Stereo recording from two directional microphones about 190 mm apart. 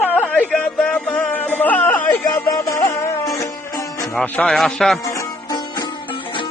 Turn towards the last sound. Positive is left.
turn(degrees=20)  # may be behind; listen again after turning